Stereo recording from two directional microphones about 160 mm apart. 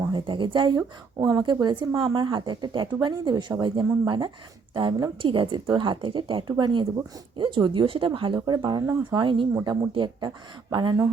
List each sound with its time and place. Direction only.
0.1 s speech: 30° right (ahead or behind)